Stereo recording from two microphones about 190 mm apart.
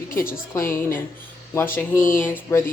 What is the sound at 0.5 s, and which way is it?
A woman's voice, 15° left (ahead or behind).